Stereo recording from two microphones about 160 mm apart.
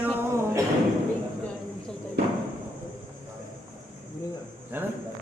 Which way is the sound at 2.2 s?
90° right.